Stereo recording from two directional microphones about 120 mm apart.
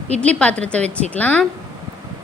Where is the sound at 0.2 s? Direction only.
10° left (ahead or behind).